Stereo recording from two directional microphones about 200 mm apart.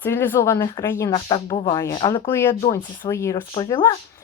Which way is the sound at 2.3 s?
10° left (ahead or behind).